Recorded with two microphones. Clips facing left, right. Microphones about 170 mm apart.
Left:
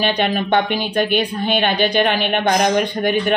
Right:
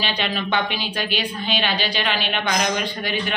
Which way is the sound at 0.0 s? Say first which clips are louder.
Left 7 dB; 55° left (ahead or behind).